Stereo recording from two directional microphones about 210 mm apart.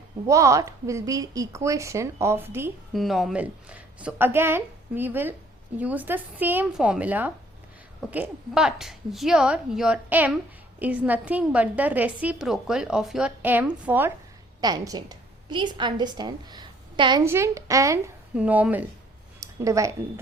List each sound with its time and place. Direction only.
0.3 s a woman's voice: 15° right (ahead or behind)
14.6 s a woman's voice: 20° right (ahead or behind)
19.4 s a sound: 15° right (ahead or behind)